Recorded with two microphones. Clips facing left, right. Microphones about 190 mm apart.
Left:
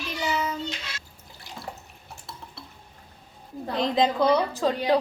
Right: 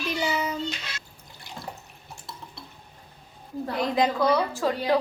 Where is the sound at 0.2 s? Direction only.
15° right (ahead or behind).